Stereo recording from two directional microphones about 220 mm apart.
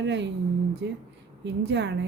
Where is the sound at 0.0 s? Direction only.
50° right (ahead or behind).